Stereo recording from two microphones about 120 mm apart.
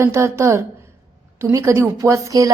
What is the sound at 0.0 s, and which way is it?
A woman's voice, 25° right (ahead or behind).